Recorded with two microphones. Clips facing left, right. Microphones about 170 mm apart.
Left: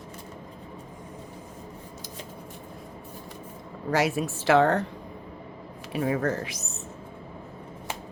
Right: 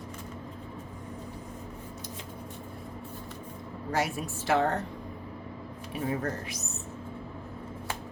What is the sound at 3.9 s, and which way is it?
Speech, 90° left.